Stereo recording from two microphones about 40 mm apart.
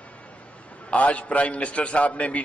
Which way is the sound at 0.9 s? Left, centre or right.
Left.